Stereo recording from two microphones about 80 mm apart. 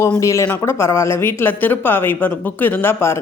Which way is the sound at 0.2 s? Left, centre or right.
Left.